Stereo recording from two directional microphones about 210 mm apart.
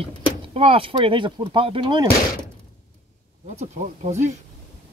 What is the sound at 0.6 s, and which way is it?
Speech, 25° right (ahead or behind).